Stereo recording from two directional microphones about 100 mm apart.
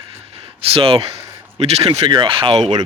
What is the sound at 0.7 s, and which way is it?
Speech, 70° right (ahead or behind).